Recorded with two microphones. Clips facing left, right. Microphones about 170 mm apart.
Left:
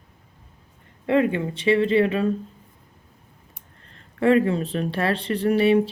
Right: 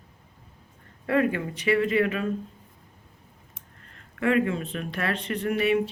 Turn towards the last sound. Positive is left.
turn(degrees=30)  # may be behind; listen again after turning